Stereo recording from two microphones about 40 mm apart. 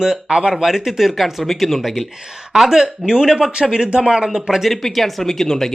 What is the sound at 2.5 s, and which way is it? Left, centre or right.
Speech, centre.